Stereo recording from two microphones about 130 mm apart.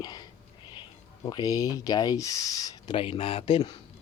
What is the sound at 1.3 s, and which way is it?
Speech, 30° left (ahead or behind).